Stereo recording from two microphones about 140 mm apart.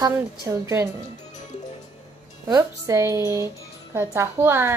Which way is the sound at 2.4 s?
20° right (ahead or behind).